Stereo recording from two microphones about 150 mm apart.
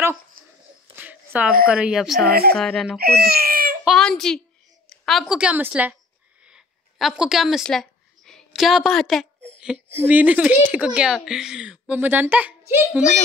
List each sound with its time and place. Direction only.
0.9 s a sound: 10° right (ahead or behind)
1.7 s speech: 5° right (ahead or behind)
2.2 s speech: 90° right
2.5 s speech: 5° left (ahead or behind)
3.0 s speech: 90° right
3.8 s a woman's voice: centre (ahead or behind)
6.4 s a sound: 5° right (ahead or behind)
10.0 s a woman's voice: 10° right (ahead or behind)